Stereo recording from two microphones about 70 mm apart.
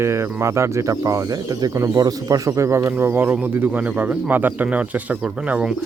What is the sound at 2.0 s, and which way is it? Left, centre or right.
Speech, right.